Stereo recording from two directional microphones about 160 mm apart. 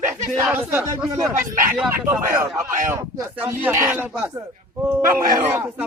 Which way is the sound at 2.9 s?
20° right (ahead or behind).